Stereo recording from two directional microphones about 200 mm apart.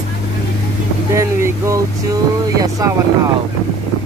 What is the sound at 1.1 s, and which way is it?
Speech, 15° right (ahead or behind).